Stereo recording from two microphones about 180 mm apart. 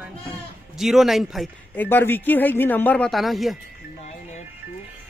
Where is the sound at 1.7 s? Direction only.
10° left (ahead or behind).